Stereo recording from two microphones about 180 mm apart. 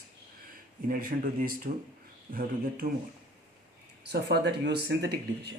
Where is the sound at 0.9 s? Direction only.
50° right (ahead or behind).